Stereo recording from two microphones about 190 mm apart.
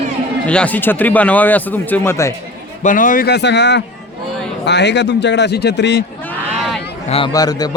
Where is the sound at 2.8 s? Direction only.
45° left (ahead or behind); by 6.0 s 65° left (ahead or behind).